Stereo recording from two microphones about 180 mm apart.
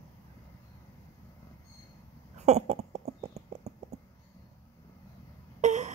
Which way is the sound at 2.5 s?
40° right (ahead or behind).